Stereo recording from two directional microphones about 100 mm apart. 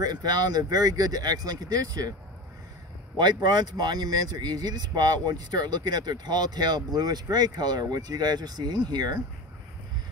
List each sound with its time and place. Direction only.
0.0 s speech: 40° right (ahead or behind)
3.2 s speech: 45° right (ahead or behind)